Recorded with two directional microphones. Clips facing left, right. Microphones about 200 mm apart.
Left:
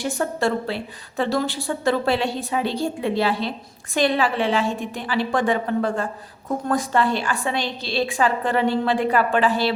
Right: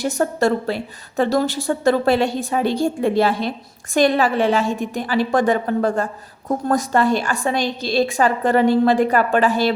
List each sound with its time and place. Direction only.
0.0 s a woman's voice: 40° right (ahead or behind)